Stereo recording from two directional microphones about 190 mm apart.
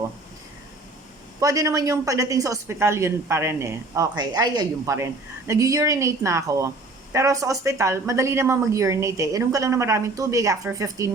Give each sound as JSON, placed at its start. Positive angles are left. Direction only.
{"t": 1.4, "sound": "speech", "side_deg": -20}